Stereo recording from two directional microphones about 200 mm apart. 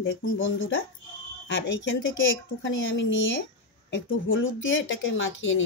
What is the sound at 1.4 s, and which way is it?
A woman's voice, 65° left (ahead or behind).